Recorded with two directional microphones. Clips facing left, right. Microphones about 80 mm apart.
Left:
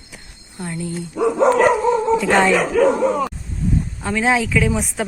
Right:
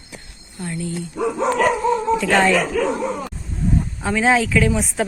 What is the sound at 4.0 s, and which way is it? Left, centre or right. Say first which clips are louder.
Speech: right 1 dB; centre.